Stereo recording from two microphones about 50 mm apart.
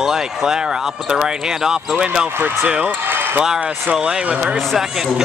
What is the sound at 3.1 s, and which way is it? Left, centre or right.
Basketball bounce, right.